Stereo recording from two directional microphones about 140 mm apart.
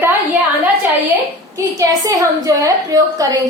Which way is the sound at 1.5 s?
25° right (ahead or behind).